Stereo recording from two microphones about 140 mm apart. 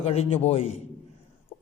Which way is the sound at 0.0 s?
45° left (ahead or behind).